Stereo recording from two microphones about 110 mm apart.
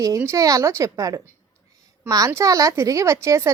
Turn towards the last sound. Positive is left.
turn(degrees=-25)  # may be behind; listen again after turning